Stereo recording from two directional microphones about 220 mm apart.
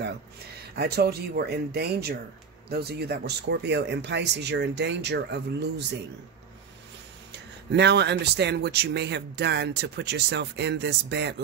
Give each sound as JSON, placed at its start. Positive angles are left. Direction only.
{"t": 0.7, "sound": "speech", "side_deg": -45}
{"t": 7.3, "sound": "speech", "side_deg": -50}